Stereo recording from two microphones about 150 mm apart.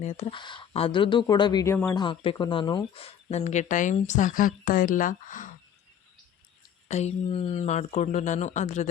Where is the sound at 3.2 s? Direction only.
45° left (ahead or behind).